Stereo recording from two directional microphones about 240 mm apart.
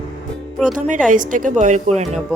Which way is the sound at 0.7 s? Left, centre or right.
Right.